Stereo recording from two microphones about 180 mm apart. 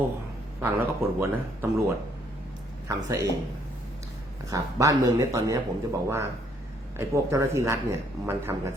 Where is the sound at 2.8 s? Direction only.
15° right (ahead or behind).